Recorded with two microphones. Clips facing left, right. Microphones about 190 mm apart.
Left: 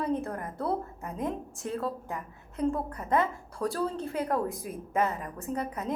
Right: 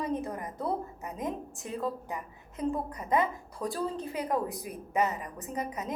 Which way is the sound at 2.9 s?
15° right (ahead or behind).